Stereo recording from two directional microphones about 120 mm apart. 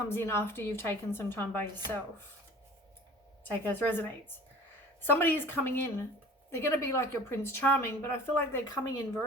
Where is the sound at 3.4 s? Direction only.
15° left (ahead or behind).